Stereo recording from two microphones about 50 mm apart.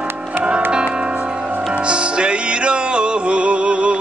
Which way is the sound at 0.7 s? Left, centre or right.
Centre.